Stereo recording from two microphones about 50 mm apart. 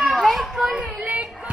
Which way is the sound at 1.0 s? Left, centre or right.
Right.